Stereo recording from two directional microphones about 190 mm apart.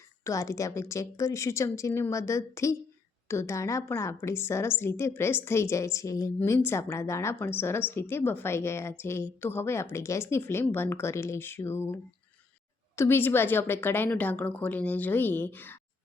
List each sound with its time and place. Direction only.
0.3 s a woman's voice: 15° left (ahead or behind)
13.0 s a woman's voice: 10° left (ahead or behind)